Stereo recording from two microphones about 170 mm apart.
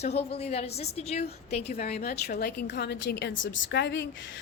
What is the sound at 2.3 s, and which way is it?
A woman's voice, 65° left (ahead or behind).